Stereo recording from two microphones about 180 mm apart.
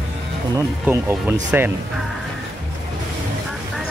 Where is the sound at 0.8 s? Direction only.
10° right (ahead or behind).